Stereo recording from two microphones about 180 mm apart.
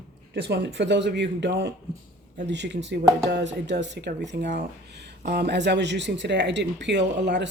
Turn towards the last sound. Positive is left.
turn(degrees=-75)  # may be behind; listen again after turning